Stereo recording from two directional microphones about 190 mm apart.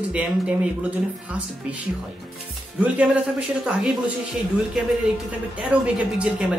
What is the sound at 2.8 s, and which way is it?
Speech, 5° right (ahead or behind).